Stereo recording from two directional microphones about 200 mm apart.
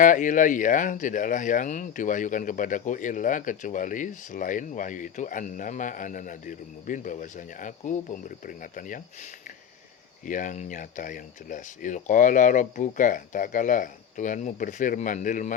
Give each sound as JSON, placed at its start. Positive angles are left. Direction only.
{"t": 0.0, "sound": "speech", "side_deg": 40}
{"t": 10.2, "sound": "speech", "side_deg": 40}